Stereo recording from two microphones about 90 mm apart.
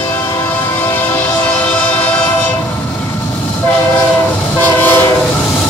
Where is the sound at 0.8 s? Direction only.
20° left (ahead or behind).